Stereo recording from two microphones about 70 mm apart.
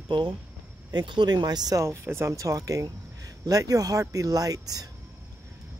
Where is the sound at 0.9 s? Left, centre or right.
Right.